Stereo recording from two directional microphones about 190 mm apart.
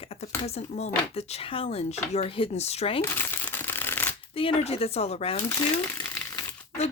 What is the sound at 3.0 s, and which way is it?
Crumpling, 10° left (ahead or behind).